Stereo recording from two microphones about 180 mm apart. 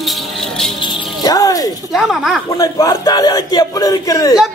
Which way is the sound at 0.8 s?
20° left (ahead or behind).